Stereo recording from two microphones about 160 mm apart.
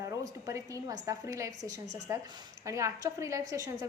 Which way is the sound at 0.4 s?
20° right (ahead or behind).